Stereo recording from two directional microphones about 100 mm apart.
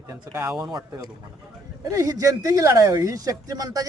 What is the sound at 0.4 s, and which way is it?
Speech, 5° right (ahead or behind).